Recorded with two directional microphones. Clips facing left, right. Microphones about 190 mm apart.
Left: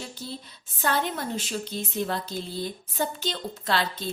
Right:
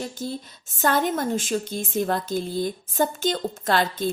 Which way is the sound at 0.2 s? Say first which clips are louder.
Right 7 dB; 45° right (ahead or behind).